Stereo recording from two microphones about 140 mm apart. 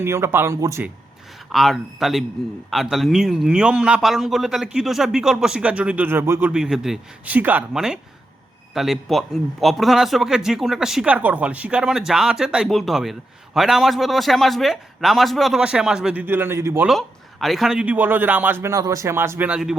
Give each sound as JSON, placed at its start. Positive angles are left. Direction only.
{"t": 0.0, "sound": "speech", "side_deg": -20}
{"t": 1.5, "sound": "a man's voice", "side_deg": 0}
{"t": 6.5, "sound": "a man's voice", "side_deg": -5}
{"t": 16.8, "sound": "a man's voice", "side_deg": 0}